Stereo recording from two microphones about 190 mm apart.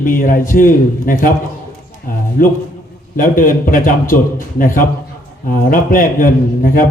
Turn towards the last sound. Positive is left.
turn(degrees=45)  # may be behind; listen again after turning